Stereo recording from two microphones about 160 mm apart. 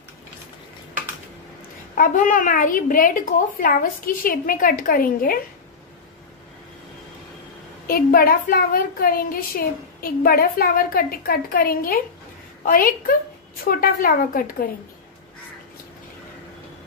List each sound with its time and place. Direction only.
2.0 s a woman's voice: 55° left (ahead or behind)
7.8 s a woman's voice: 65° left (ahead or behind)